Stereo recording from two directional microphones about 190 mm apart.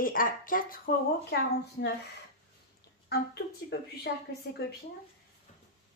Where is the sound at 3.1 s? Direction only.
55° left (ahead or behind).